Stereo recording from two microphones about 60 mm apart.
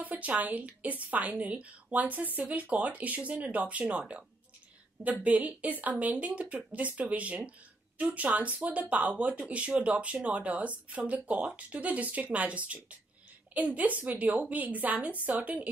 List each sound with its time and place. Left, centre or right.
0.0 s speech: right
5.2 s speech: right